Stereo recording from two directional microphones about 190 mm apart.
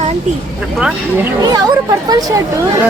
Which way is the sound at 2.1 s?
20° right (ahead or behind).